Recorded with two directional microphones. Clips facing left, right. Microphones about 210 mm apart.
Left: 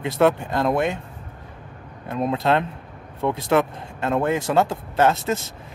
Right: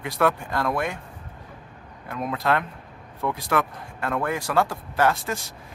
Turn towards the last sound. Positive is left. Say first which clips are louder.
# left 4 dB
turn(degrees=25)  # may be behind; listen again after turning